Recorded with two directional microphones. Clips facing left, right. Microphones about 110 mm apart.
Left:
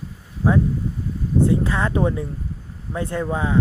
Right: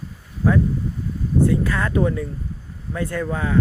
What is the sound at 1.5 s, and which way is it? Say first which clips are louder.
Speech: left 1 dB; 25° left (ahead or behind).